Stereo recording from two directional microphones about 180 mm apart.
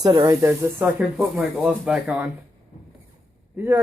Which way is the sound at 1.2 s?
Centre (ahead or behind).